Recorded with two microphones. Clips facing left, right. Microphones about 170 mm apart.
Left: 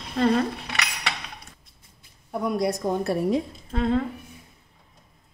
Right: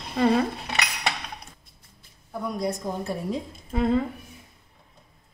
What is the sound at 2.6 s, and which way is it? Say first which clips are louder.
Speech: left 3 dB; 70° left (ahead or behind).